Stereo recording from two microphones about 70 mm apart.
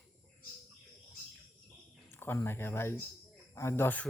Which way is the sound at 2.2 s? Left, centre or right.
Left.